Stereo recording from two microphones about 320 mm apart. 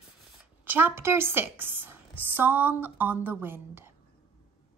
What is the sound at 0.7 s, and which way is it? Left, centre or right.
A woman's voice, centre.